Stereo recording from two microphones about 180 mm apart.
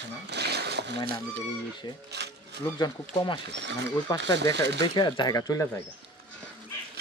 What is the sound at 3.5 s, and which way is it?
Speech, 75° right (ahead or behind).